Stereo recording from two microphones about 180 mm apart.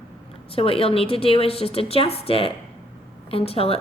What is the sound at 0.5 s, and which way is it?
A woman's voice, 30° left (ahead or behind).